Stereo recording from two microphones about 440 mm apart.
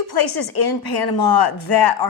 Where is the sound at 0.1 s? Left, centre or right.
Left.